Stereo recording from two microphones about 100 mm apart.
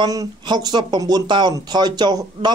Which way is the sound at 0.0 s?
40° right (ahead or behind).